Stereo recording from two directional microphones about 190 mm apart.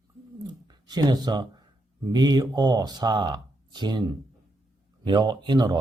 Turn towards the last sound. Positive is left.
turn(degrees=-20)  # may be behind; listen again after turning